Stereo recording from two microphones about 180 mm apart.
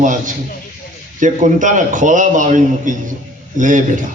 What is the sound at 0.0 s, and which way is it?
A man's voice, 45° right (ahead or behind).